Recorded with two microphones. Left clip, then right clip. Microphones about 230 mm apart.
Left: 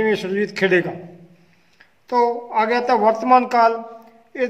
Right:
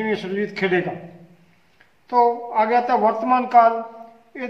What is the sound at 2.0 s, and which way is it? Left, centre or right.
Speech, left.